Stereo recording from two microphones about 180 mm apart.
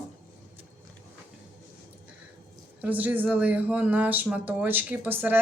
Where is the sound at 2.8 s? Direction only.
10° right (ahead or behind).